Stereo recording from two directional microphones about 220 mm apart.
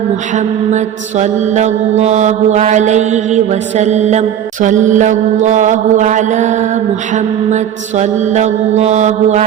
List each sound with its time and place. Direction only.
0.3 s mantra: 30° right (ahead or behind)